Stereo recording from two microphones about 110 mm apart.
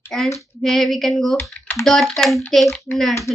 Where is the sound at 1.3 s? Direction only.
20° left (ahead or behind).